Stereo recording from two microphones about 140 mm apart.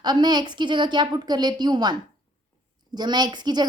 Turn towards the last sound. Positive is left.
turn(degrees=-30)  # may be behind; listen again after turning